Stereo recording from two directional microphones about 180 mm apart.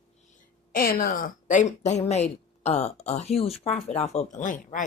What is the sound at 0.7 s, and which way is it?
Speech, 55° left (ahead or behind).